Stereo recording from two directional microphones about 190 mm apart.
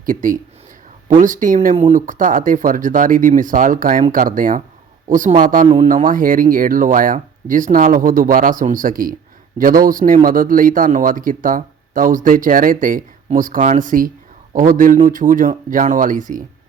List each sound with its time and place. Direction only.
0.0 s speech: 45° right (ahead or behind)
5.6 s speech: 30° right (ahead or behind)
5.9 s speech: 45° right (ahead or behind)